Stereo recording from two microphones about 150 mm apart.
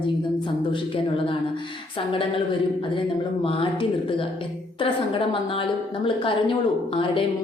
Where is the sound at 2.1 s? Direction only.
35° left (ahead or behind).